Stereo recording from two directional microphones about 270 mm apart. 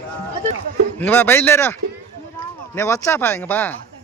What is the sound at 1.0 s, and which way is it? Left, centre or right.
Speech, centre.